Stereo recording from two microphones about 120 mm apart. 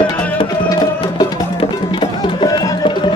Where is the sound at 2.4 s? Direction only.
35° left (ahead or behind).